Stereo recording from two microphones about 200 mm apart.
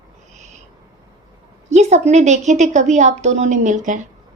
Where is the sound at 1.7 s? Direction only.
35° right (ahead or behind).